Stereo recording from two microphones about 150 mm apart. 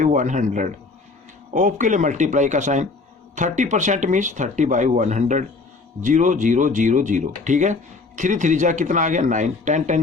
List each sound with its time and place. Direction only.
0.0 s speech: 55° right (ahead or behind)